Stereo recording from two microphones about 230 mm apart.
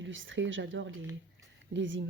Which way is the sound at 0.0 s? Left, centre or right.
Right.